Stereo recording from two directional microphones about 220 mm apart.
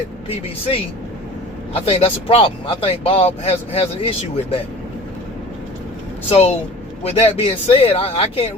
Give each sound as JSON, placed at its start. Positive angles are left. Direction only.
{"t": 1.7, "sound": "speech", "side_deg": 25}
{"t": 6.2, "sound": "speech", "side_deg": 25}